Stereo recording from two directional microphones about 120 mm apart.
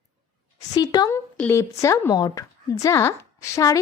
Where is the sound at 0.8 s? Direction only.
35° left (ahead or behind).